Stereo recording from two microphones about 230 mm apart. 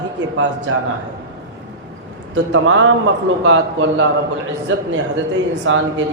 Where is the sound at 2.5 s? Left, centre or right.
Right.